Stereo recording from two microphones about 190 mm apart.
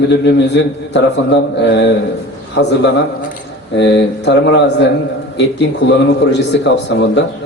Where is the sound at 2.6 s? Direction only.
70° left (ahead or behind).